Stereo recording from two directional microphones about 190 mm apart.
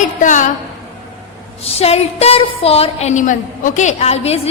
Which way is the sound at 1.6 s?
30° left (ahead or behind).